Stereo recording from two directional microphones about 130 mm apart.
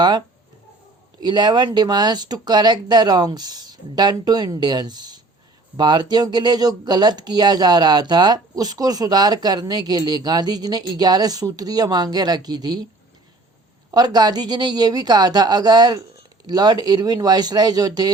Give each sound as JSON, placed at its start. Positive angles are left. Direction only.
{"t": 1.2, "sound": "speech", "side_deg": -35}
{"t": 13.9, "sound": "speech", "side_deg": -30}